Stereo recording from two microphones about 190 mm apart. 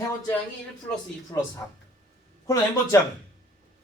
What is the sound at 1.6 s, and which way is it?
Speech, 10° left (ahead or behind).